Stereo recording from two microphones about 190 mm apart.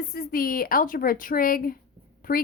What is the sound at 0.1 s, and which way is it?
A woman's voice, 50° left (ahead or behind).